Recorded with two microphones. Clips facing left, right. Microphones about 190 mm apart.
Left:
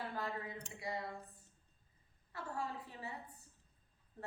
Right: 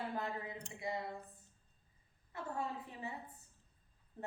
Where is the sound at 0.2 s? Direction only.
20° right (ahead or behind).